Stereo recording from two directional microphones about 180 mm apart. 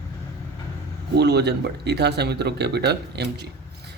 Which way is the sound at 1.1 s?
65° right (ahead or behind).